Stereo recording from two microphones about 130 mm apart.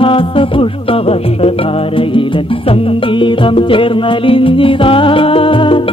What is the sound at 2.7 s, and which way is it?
Music, 40° left (ahead or behind).